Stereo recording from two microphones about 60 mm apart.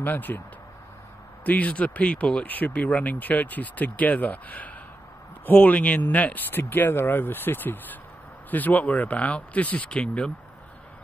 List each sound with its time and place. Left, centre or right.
0.0 s speech: left
1.4 s speech: left